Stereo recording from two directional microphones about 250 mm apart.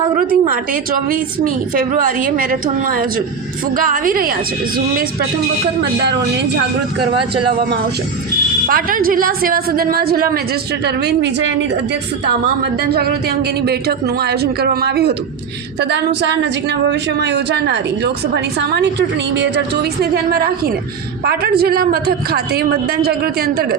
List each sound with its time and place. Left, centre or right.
0.2 s a woman's voice: right
8.6 s a woman's voice: right
12.9 s a woman's voice: right